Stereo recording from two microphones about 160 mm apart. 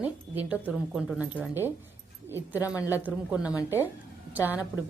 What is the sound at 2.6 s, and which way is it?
Speech, 20° left (ahead or behind).